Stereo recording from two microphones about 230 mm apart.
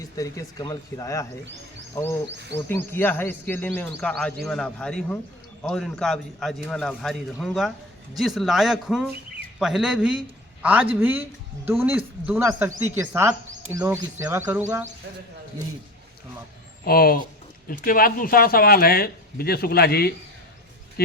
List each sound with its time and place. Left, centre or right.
0.0 s speech: centre
2.3 s a sound: right
2.6 s a man's voice: centre
16.8 s speech: left